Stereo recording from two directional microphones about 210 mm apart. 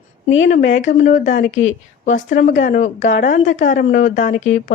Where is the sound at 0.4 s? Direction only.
35° left (ahead or behind).